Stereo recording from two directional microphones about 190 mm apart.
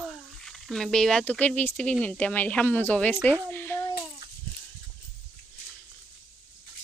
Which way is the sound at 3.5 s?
10° left (ahead or behind).